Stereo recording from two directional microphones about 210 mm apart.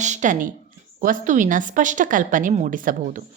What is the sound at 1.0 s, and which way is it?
Speech, 35° right (ahead or behind).